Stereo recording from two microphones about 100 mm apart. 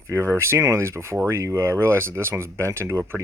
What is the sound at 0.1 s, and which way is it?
Speech, 30° right (ahead or behind).